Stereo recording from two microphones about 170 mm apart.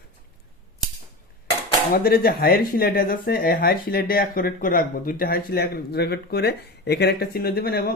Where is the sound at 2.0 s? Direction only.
65° left (ahead or behind).